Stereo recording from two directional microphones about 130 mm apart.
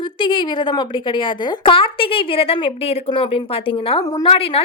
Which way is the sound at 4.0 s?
30° left (ahead or behind).